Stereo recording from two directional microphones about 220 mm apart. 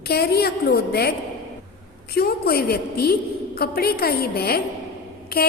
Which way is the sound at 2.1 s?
45° left (ahead or behind).